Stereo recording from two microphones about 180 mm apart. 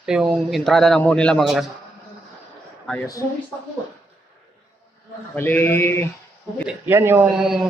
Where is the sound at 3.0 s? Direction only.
20° left (ahead or behind).